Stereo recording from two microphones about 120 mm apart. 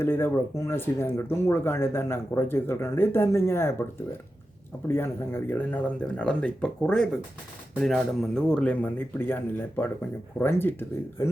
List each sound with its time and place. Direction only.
0.0 s speech: 20° left (ahead or behind)
4.9 s speech: 20° left (ahead or behind)